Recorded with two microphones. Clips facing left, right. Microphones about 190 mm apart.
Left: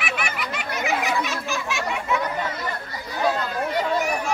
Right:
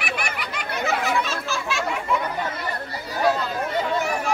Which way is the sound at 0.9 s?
15° left (ahead or behind).